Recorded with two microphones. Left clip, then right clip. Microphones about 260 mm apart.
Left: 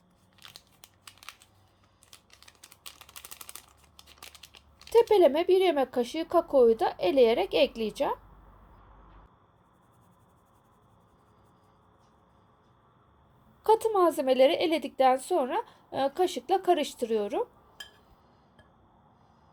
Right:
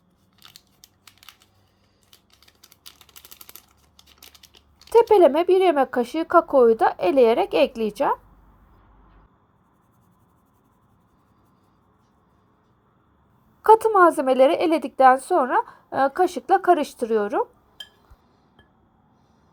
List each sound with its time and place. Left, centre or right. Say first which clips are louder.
0.3 s crunch: right 1 dB; centre
2.5 s typing: right 1 dB; centre
4.9 s speech: right 6 dB; centre
13.6 s speech: right 9 dB; right